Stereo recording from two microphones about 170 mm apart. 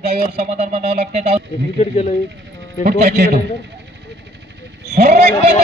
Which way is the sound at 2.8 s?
65° right (ahead or behind).